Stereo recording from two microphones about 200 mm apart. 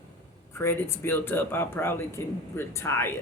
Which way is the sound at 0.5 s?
10° left (ahead or behind).